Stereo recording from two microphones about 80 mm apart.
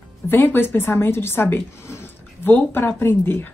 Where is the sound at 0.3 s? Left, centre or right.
Left.